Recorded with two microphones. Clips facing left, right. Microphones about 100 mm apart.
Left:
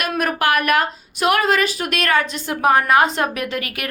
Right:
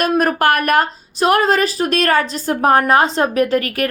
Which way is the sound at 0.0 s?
40° right (ahead or behind).